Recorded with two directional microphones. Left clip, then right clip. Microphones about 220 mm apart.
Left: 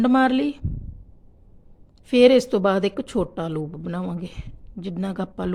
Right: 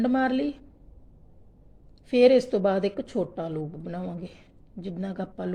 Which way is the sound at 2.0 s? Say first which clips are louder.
Left 4 dB; 25° left (ahead or behind).